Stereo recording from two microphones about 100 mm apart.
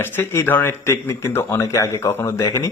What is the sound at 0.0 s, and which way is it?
Speech, 20° left (ahead or behind).